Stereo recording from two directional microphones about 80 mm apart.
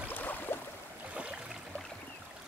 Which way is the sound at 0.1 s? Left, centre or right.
Left.